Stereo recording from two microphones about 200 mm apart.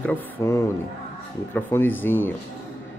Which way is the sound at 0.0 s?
10° left (ahead or behind).